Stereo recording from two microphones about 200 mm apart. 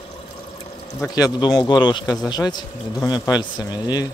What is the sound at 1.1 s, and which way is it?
Speech, 20° left (ahead or behind).